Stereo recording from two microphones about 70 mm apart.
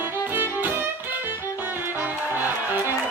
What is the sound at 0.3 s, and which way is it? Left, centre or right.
Music, right.